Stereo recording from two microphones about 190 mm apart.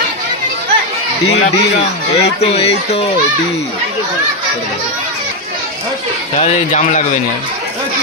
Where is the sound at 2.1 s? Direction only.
35° left (ahead or behind).